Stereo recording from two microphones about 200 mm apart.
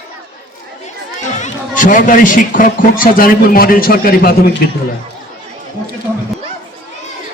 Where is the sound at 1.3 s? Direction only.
40° left (ahead or behind).